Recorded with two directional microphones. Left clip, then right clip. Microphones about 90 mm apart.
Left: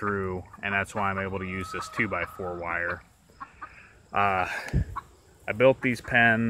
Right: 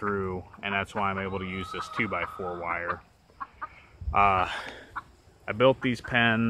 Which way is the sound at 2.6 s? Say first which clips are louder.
Left 2 dB; 10° left (ahead or behind).